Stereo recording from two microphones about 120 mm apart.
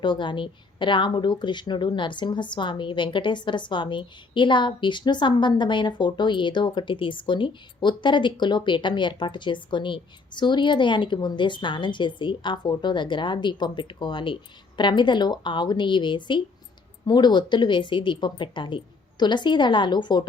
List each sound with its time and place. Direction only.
0.0 s a woman's voice: 40° left (ahead or behind)